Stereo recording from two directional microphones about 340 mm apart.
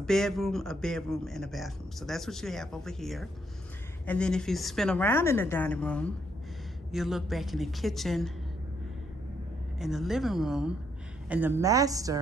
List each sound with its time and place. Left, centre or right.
0.0 s a man's voice: centre
9.8 s a man's voice: centre